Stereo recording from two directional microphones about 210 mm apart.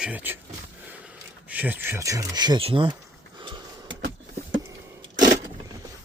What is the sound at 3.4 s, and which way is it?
Sniff, 20° right (ahead or behind).